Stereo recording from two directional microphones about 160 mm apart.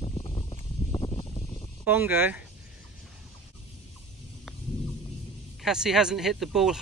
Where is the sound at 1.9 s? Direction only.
10° right (ahead or behind).